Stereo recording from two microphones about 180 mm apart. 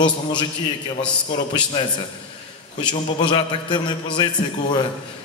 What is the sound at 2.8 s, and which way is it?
A man's voice, 25° left (ahead or behind).